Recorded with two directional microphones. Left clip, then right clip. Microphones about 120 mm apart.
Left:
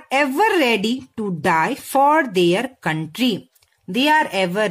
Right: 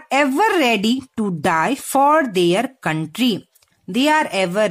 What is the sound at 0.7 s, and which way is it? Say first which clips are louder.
Speech: right 1 dB; 35° right (ahead or behind).